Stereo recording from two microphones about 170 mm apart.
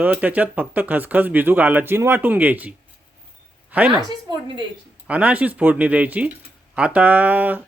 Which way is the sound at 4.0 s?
25° right (ahead or behind).